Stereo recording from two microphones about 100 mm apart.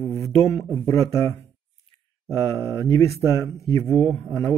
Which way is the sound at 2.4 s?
30° left (ahead or behind).